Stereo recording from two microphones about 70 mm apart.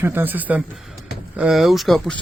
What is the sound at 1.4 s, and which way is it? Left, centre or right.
Speech, centre.